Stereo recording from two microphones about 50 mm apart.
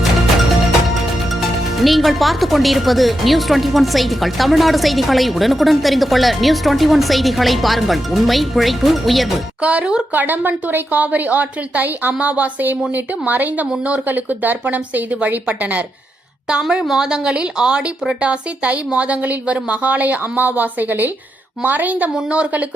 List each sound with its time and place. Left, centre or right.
1.4 s speech: centre
9.6 s speech: right
10.1 s a woman's voice: right
11.0 s a woman's voice: right
16.8 s a woman's voice: centre; by 22.6 s right